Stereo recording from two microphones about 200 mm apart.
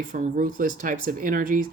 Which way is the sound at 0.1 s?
40° right (ahead or behind).